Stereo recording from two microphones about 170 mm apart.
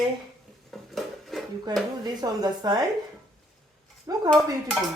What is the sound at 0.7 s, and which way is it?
Dishes, centre (ahead or behind).